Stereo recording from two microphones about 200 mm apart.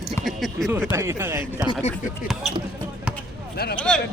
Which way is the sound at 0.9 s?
15° right (ahead or behind).